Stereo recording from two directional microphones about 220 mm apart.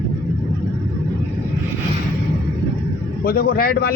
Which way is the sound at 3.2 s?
40° left (ahead or behind).